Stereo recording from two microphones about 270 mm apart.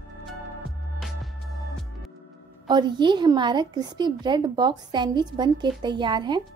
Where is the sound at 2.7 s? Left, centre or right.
Centre.